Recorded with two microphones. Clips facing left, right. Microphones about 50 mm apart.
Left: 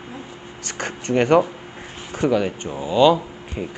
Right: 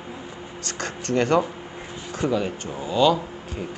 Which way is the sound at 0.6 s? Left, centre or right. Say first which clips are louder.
Left 3 dB; left.